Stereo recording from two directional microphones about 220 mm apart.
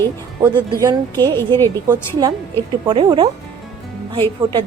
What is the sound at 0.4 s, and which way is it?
A woman's voice, 15° right (ahead or behind).